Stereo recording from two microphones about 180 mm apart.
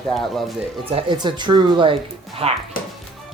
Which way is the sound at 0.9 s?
25° right (ahead or behind).